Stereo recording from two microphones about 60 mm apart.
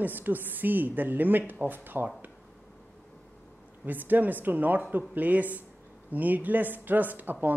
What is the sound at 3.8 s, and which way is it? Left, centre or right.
Speech, right.